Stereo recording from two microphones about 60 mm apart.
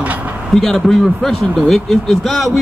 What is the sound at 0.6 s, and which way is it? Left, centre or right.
Speech, centre.